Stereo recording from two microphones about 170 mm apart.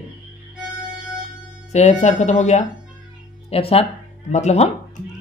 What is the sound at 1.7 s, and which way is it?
A woman's voice, 40° left (ahead or behind).